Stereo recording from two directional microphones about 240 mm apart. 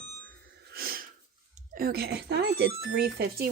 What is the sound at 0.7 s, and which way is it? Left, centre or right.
Wheeze, right.